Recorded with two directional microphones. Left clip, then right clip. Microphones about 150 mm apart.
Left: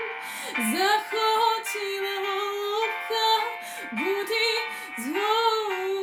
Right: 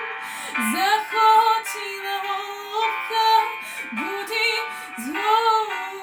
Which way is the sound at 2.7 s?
25° left (ahead or behind).